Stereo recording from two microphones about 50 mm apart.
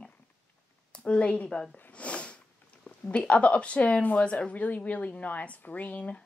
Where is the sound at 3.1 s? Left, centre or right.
Left.